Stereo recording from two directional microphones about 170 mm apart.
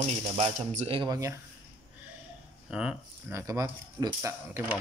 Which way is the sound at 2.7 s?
10° right (ahead or behind).